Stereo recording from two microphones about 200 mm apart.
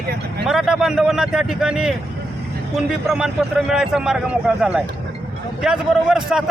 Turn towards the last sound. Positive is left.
turn(degrees=0)  # may be behind; listen again after turning